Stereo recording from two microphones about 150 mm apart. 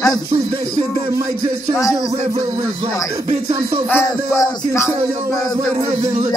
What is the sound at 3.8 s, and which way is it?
Music, 15° left (ahead or behind).